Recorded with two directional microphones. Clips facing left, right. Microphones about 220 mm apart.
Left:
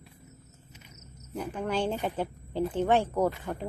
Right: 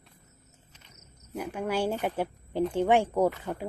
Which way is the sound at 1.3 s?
10° right (ahead or behind).